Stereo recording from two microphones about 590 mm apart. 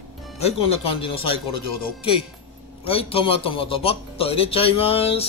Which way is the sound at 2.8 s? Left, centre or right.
Centre.